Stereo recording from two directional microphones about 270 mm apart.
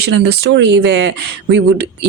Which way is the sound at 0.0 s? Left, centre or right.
Right.